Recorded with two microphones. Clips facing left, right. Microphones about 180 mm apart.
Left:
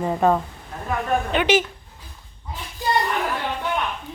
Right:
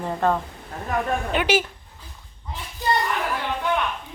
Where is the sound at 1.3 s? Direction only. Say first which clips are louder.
Left 2 dB; 5° right (ahead or behind).